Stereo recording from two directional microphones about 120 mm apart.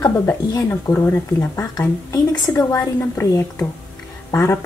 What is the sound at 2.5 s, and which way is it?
A woman's voice, 20° left (ahead or behind).